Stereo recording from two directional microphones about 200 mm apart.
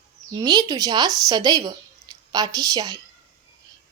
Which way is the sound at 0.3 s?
20° right (ahead or behind).